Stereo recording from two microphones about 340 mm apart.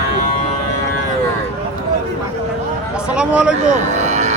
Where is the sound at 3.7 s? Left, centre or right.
Right.